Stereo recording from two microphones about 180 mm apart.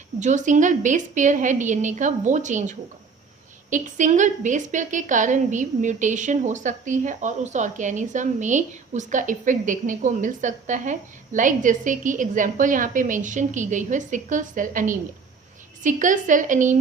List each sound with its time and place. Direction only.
0.2 s a woman's voice: 45° right (ahead or behind)